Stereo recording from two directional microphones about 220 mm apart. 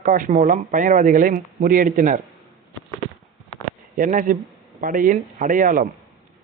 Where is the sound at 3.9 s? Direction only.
35° right (ahead or behind).